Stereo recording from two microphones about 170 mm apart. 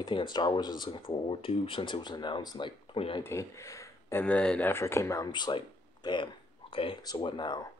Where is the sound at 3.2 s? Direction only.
15° left (ahead or behind).